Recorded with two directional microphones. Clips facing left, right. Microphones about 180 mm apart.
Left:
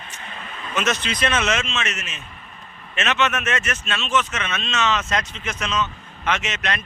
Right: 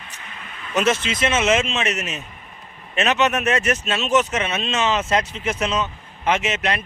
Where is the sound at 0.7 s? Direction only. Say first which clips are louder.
Right 4 dB; 30° right (ahead or behind).